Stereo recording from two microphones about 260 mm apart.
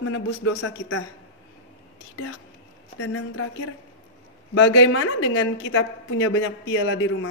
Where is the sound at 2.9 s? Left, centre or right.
Left.